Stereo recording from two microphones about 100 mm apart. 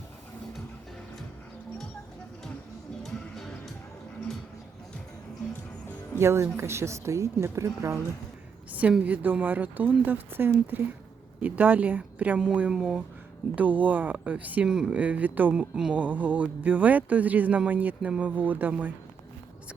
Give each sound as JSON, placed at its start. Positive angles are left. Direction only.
{"t": 3.0, "sound": "music", "side_deg": 5}
{"t": 6.1, "sound": "speech", "side_deg": -25}
{"t": 8.7, "sound": "speech", "side_deg": -15}